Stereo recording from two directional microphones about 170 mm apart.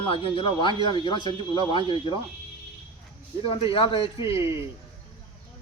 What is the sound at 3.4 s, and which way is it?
Speech, 30° left (ahead or behind).